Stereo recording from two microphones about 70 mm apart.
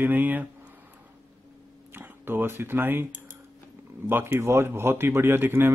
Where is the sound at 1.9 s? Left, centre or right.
Right.